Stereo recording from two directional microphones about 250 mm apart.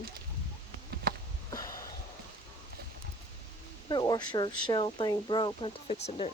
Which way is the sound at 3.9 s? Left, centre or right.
Centre.